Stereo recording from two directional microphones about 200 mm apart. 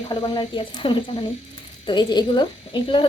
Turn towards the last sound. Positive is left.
turn(degrees=25)  # may be behind; listen again after turning